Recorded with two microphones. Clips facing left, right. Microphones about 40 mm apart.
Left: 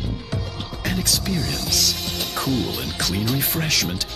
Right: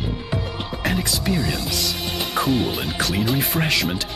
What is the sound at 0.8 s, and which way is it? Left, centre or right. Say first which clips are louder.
Speech: right 2 dB; centre.